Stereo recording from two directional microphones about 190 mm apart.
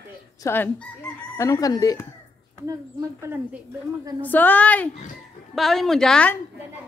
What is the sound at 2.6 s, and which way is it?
Speech, 15° right (ahead or behind).